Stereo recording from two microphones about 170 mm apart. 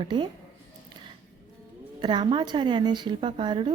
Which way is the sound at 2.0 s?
30° right (ahead or behind).